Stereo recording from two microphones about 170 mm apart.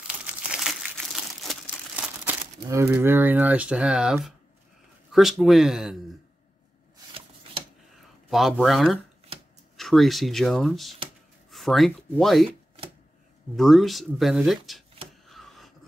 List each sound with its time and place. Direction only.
0.0 s crumpling: 5° right (ahead or behind)
2.2 s speech: 15° right (ahead or behind)
8.3 s speech: centre (ahead or behind)
12.4 s chopping: 35° right (ahead or behind)
13.6 s speech: centre (ahead or behind)
15.2 s a sound: centre (ahead or behind)